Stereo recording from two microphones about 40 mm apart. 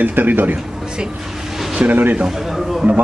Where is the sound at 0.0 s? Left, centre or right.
Right.